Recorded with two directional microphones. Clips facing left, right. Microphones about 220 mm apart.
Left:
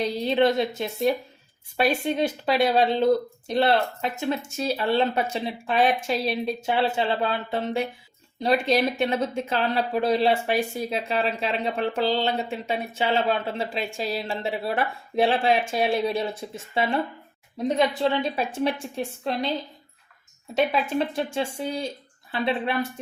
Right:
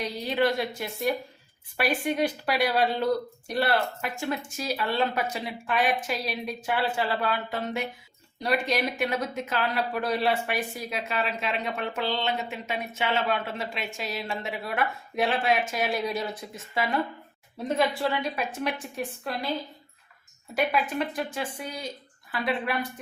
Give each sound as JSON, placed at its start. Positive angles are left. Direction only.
{"t": 0.0, "sound": "speech", "side_deg": 25}
{"t": 20.5, "sound": "speech", "side_deg": 25}